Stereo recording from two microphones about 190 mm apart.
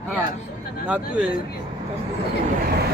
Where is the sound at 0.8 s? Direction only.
5° right (ahead or behind).